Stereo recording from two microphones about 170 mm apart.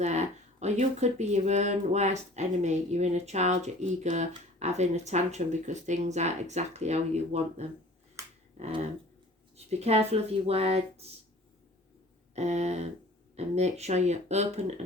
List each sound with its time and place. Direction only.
0.0 s speech: 40° right (ahead or behind)
8.2 s finger snapping: 15° right (ahead or behind)
8.5 s a sound: 40° right (ahead or behind)
9.6 s speech: 40° right (ahead or behind)
12.3 s speech: 40° right (ahead or behind)